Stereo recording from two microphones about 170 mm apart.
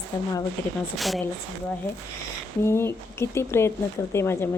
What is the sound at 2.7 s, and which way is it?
Speech, 15° left (ahead or behind).